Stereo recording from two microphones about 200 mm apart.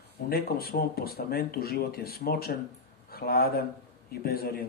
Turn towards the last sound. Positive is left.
turn(degrees=50)  # may be behind; listen again after turning